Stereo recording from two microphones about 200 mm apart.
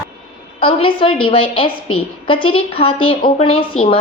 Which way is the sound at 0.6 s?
25° left (ahead or behind).